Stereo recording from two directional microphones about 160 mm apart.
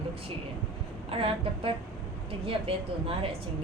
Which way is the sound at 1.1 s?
35° right (ahead or behind).